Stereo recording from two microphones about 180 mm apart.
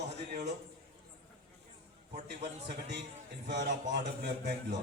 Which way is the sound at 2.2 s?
70° right (ahead or behind).